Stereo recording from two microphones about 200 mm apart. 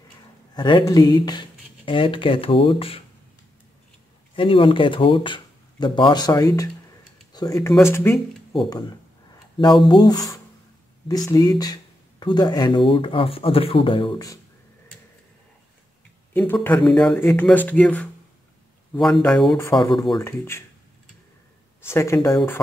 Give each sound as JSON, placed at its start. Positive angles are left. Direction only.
{"t": 0.6, "sound": "speech", "side_deg": 25}
{"t": 4.4, "sound": "speech", "side_deg": 25}
{"t": 9.6, "sound": "speech", "side_deg": 20}
{"t": 16.3, "sound": "speech", "side_deg": 10}
{"t": 19.8, "sound": "speech", "side_deg": 20}
{"t": 21.8, "sound": "speech", "side_deg": 10}